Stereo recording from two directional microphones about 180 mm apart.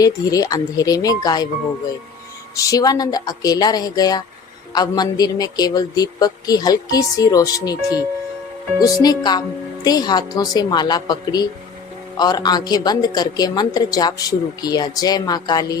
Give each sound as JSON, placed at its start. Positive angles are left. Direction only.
{"t": 0.0, "sound": "a man's voice", "side_deg": 20}
{"t": 2.6, "sound": "a man's voice", "side_deg": 20}